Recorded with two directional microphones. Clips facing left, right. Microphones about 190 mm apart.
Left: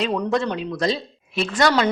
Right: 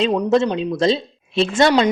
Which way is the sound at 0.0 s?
25° right (ahead or behind).